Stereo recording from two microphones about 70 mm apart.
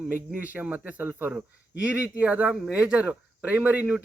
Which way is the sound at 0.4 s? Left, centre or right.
Right.